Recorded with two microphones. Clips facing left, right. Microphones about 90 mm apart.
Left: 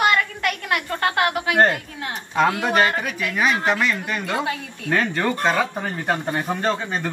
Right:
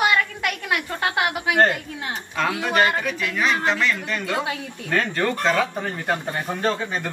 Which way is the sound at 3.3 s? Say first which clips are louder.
Left 2 dB; 20° left (ahead or behind).